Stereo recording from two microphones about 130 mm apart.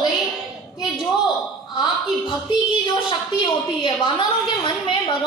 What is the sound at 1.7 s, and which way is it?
A woman's voice, 35° left (ahead or behind).